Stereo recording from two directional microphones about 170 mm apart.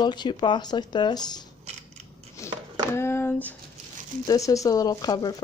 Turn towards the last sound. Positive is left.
turn(degrees=20)  # may be behind; listen again after turning